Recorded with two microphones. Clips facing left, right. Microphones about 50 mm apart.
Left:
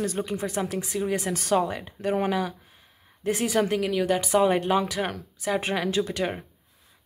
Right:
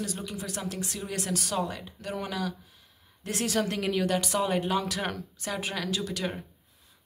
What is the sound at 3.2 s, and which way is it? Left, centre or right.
Speech, centre.